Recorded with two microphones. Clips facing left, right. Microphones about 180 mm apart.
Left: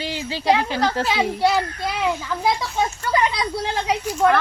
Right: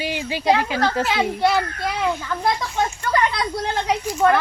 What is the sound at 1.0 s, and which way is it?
A child's voice, 10° left (ahead or behind).